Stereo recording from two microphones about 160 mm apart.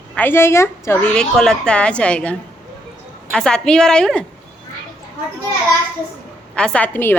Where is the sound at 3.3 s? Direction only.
5° left (ahead or behind).